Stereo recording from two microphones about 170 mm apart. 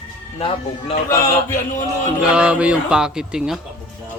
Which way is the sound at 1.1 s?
15° left (ahead or behind).